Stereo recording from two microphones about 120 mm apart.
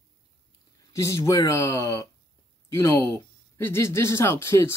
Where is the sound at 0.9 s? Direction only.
25° left (ahead or behind).